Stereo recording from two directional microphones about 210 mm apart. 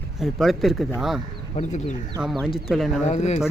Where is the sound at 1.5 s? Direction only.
35° left (ahead or behind).